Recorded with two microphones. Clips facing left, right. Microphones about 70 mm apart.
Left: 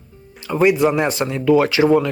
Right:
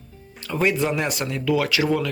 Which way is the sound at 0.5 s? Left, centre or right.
Centre.